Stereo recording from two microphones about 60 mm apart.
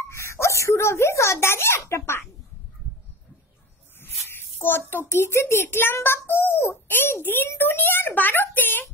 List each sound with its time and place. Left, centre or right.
0.1 s a child's voice: left
4.0 s a child's voice: left